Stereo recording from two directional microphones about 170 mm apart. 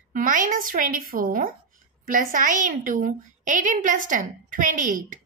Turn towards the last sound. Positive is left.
turn(degrees=-50)  # may be behind; listen again after turning